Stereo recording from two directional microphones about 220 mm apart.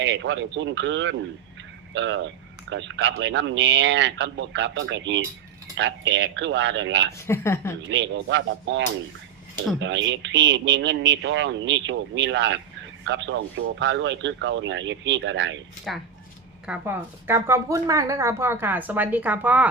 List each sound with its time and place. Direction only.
0.0 s a man's voice: 55° right (ahead or behind)
7.3 s a woman's voice: 10° left (ahead or behind)
7.9 s a man's voice: 55° right (ahead or behind)
9.8 s a man's voice: 55° right (ahead or behind)
15.9 s a woman's voice: centre (ahead or behind)